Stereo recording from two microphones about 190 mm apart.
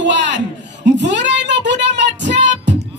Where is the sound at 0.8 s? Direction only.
70° right (ahead or behind).